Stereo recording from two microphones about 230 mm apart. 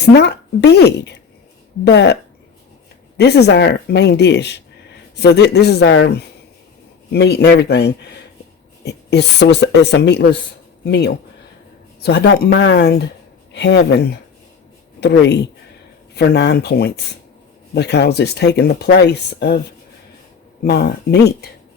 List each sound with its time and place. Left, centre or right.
0.1 s speech: left
3.2 s speech: left
16.1 s speech: left
20.7 s speech: left